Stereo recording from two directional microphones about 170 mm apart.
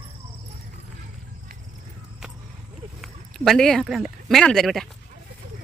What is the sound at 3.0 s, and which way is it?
Speech, centre (ahead or behind).